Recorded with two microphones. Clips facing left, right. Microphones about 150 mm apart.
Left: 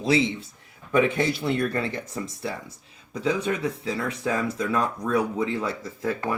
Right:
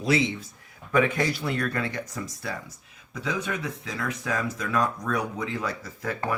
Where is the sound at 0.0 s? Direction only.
25° left (ahead or behind).